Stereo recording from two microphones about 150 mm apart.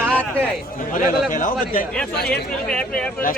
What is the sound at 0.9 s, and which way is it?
Speech, 60° left (ahead or behind).